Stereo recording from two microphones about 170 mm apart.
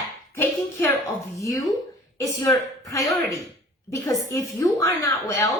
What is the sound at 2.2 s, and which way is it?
A woman's voice, 20° left (ahead or behind).